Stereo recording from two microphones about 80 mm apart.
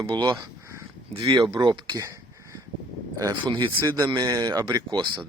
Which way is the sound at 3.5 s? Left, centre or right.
Right.